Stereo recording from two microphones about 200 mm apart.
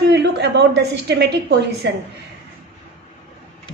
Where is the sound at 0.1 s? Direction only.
60° right (ahead or behind).